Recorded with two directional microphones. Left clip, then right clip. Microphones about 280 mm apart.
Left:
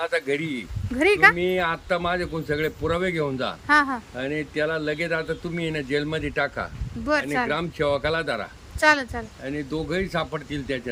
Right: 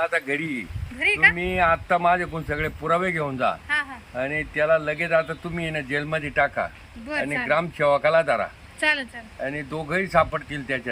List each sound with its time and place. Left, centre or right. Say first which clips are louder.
0.0 s speech: right 1 dB; centre
8.8 s speech: left 4 dB; centre
9.4 s speech: right 2 dB; centre